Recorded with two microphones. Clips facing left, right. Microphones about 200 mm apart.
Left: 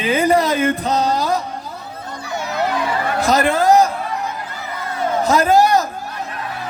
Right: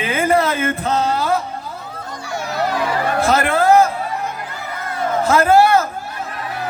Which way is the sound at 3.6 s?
15° left (ahead or behind).